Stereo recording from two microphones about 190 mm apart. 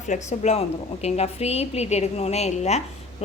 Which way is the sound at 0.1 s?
40° left (ahead or behind).